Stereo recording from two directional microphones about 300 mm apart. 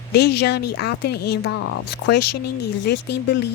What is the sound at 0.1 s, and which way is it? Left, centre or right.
Speech, left.